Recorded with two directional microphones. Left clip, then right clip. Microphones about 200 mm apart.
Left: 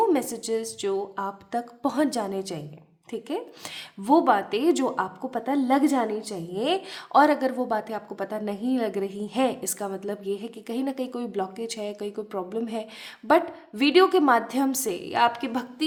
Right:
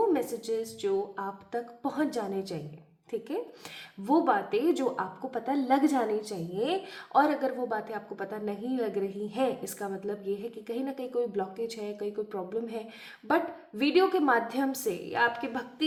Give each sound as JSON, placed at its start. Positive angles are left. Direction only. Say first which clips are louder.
{"t": 0.0, "sound": "a woman's voice", "louder": "left 4 dB", "side_deg": 45}